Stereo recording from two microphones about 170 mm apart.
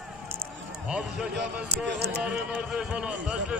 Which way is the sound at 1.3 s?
75° right (ahead or behind).